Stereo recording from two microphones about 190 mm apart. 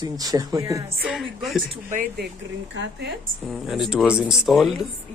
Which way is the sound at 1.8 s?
50° right (ahead or behind).